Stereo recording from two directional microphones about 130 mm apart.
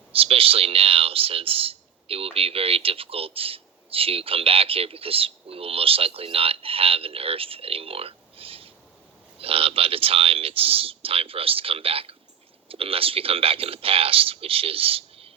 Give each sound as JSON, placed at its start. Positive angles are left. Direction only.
{"t": 0.1, "sound": "speech", "side_deg": -45}